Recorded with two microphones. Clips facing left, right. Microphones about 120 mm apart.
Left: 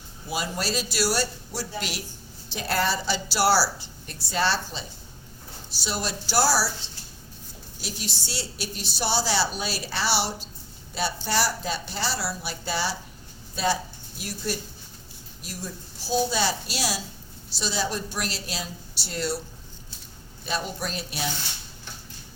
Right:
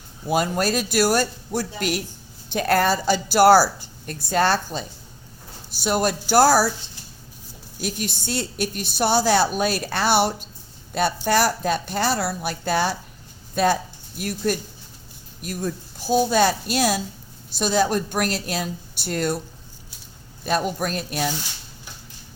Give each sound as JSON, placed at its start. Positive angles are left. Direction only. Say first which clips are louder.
{"t": 0.3, "sound": "a woman's voice", "louder": "right 8 dB", "side_deg": -50}
{"t": 7.8, "sound": "a woman's voice", "louder": "right 8 dB", "side_deg": -55}
{"t": 20.4, "sound": "a woman's voice", "louder": "right 7 dB", "side_deg": -50}